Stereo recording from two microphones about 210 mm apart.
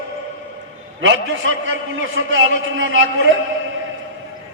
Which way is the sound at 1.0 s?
65° right (ahead or behind).